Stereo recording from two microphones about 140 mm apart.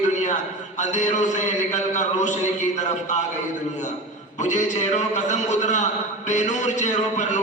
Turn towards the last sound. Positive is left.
turn(degrees=60)  # may be behind; listen again after turning